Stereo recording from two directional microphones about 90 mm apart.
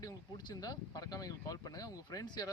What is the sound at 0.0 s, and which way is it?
Speech, 45° left (ahead or behind).